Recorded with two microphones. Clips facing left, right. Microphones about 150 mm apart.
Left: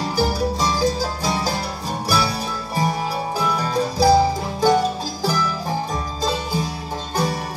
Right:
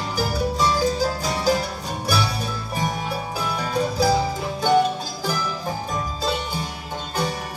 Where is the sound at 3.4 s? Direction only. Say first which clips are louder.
Left 2 dB; 35° left (ahead or behind).